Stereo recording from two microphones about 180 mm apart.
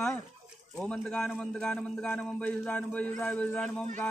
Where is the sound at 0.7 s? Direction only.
5° left (ahead or behind).